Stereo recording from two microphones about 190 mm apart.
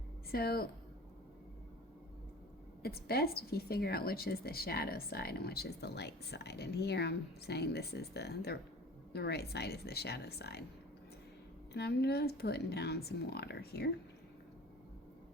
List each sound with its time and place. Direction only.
0.3 s a woman's voice: 55° left (ahead or behind)
2.8 s a woman's voice: 55° left (ahead or behind)
11.7 s a woman's voice: 60° left (ahead or behind)